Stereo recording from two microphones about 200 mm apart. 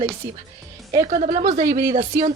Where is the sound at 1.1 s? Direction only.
40° right (ahead or behind).